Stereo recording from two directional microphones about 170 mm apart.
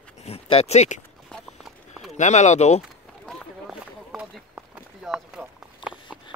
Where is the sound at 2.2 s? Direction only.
45° left (ahead or behind).